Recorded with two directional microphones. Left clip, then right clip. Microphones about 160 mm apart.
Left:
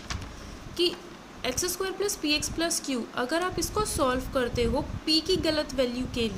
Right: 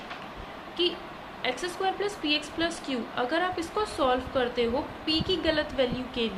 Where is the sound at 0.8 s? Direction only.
45° left (ahead or behind).